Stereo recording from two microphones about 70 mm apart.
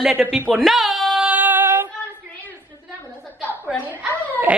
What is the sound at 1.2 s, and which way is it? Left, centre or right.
Female singing, right.